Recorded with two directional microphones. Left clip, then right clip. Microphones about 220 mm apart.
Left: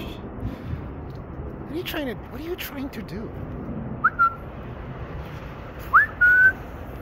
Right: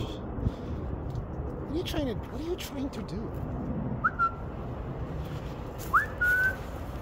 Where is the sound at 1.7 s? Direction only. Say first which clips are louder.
Left 3 dB; centre (ahead or behind).